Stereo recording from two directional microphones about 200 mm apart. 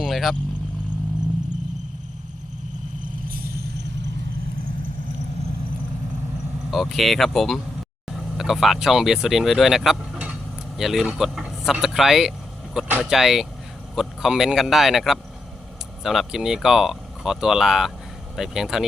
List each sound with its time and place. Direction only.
0.0 s vehicle: centre (ahead or behind)
3.2 s a sound: 50° right (ahead or behind)
6.7 s speech: centre (ahead or behind)